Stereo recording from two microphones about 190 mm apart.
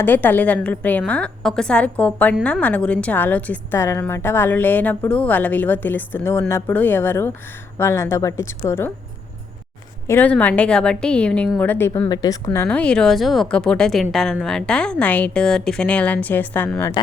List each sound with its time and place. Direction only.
0.0 s a woman's voice: 10° left (ahead or behind)
10.1 s a woman's voice: 10° left (ahead or behind)
12.5 s speech: 5° left (ahead or behind)